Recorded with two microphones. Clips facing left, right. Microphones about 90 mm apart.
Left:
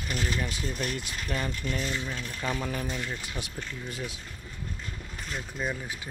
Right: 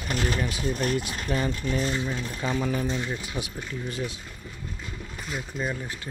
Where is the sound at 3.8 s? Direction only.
Centre (ahead or behind).